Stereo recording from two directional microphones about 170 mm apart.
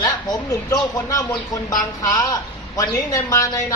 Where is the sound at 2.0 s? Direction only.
20° left (ahead or behind).